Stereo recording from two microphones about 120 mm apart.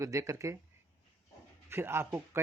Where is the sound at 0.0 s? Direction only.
25° right (ahead or behind).